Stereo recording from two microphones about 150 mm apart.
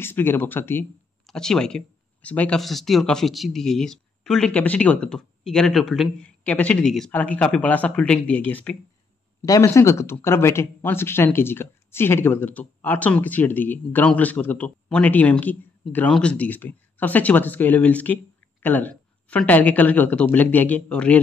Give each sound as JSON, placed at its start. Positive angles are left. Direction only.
{"t": 0.0, "sound": "speech", "side_deg": 15}
{"t": 1.2, "sound": "speech", "side_deg": 5}